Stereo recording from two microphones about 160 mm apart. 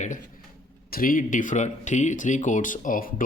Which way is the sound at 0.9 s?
60° left (ahead or behind).